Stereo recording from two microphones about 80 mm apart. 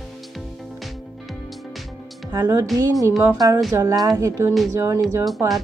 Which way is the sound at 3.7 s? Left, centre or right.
Right.